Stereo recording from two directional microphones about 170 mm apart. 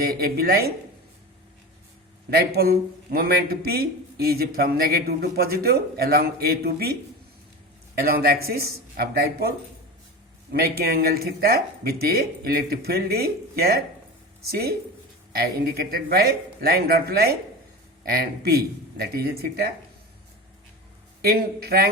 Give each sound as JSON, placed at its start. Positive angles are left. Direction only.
{"t": 0.0, "sound": "speech", "side_deg": -65}
{"t": 2.3, "sound": "speech", "side_deg": -65}
{"t": 7.9, "sound": "speech", "side_deg": -65}
{"t": 21.2, "sound": "speech", "side_deg": -65}